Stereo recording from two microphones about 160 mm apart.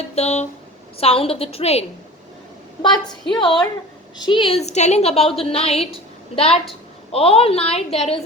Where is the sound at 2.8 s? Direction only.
30° left (ahead or behind).